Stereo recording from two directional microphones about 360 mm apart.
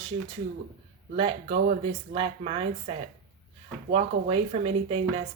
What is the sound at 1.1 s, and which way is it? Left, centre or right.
Speech, centre.